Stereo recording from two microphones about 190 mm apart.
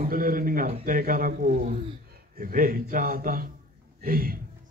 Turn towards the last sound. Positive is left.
turn(degrees=-50)  # may be behind; listen again after turning